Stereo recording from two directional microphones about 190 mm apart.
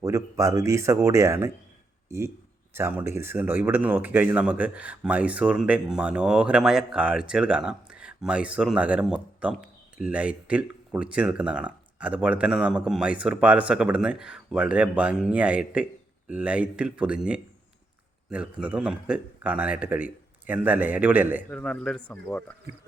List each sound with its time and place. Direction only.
0.0 s speech: 15° right (ahead or behind)
21.5 s speech: 5° left (ahead or behind)